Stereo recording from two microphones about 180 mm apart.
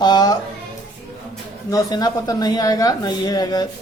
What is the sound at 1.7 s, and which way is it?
A woman's voice, 20° left (ahead or behind).